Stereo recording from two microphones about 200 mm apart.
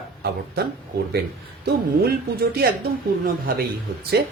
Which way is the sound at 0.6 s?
50° right (ahead or behind).